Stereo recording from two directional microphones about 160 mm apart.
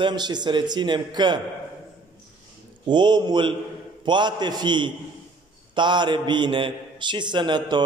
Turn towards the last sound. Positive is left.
turn(degrees=-30)  # may be behind; listen again after turning